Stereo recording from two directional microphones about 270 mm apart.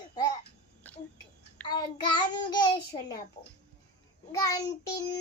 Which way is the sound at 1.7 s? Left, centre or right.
Centre.